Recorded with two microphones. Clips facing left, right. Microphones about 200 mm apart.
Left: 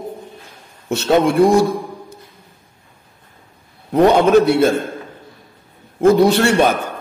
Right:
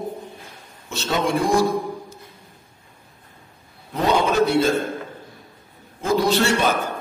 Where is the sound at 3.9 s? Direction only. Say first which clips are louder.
Left 8 dB; 60° left (ahead or behind).